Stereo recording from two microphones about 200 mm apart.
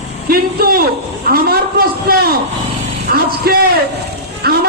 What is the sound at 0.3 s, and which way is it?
Speech, 45° right (ahead or behind).